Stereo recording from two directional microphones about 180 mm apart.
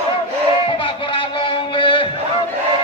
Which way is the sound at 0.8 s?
30° left (ahead or behind).